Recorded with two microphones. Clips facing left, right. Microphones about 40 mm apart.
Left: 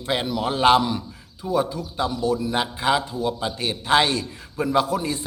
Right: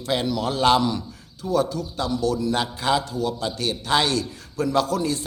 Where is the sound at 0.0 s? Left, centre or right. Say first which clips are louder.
Even; left.